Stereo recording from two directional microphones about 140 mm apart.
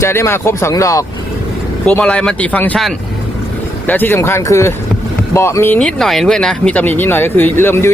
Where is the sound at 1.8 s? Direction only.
10° left (ahead or behind).